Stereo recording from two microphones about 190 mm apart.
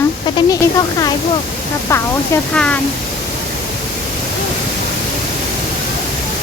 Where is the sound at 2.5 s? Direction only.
5° left (ahead or behind).